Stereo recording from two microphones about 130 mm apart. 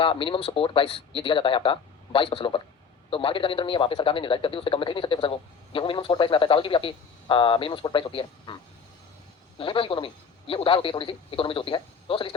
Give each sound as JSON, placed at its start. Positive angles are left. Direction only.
{"t": 0.0, "sound": "a man's voice", "side_deg": 40}
{"t": 9.6, "sound": "a man's voice", "side_deg": 40}